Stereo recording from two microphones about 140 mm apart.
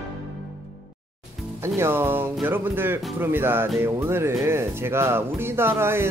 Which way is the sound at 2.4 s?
15° right (ahead or behind).